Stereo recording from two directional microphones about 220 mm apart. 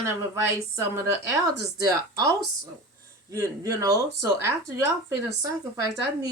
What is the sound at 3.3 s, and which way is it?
A woman's voice, 15° right (ahead or behind).